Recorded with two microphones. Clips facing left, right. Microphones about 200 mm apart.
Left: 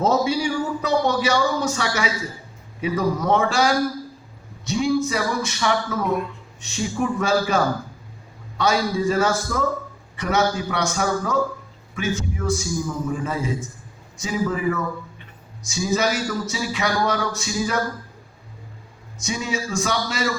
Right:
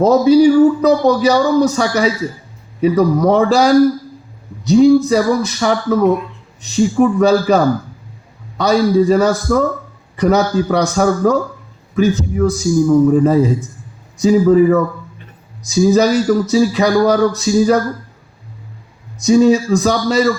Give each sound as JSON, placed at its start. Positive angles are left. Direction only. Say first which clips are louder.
{"t": 0.0, "sound": "a man's voice", "louder": "right 12 dB", "side_deg": -35}
{"t": 3.2, "sound": "a man's voice", "louder": "right 7 dB", "side_deg": -35}
{"t": 15.2, "sound": "a sound", "louder": "right 4 dB", "side_deg": -35}
{"t": 15.9, "sound": "a man's voice", "louder": "right 9 dB", "side_deg": -35}
{"t": 19.2, "sound": "a man's voice", "louder": "right 17 dB", "side_deg": -35}